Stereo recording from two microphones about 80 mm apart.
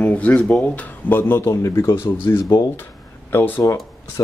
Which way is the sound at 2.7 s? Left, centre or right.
Left.